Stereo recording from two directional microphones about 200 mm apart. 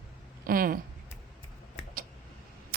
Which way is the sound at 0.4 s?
45° right (ahead or behind).